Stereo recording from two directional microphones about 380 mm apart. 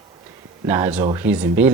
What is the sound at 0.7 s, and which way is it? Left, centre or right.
Speech, centre.